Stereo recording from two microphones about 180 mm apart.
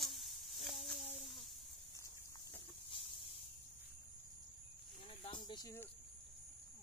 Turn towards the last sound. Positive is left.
turn(degrees=25)  # may be behind; listen again after turning